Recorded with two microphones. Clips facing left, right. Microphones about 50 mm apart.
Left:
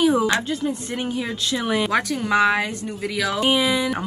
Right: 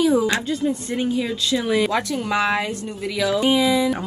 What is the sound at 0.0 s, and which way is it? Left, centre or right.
A woman's voice, left.